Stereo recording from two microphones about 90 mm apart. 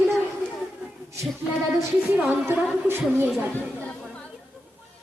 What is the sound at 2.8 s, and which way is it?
Speech, 25° right (ahead or behind).